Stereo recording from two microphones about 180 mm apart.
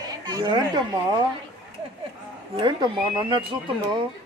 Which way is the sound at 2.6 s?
25° right (ahead or behind).